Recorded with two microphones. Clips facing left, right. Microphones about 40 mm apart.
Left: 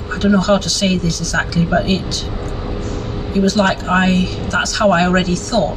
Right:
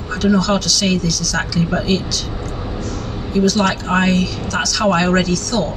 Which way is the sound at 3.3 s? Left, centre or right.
Left.